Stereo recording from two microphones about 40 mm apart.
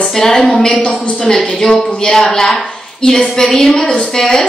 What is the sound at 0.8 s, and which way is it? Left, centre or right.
A woman's voice, left.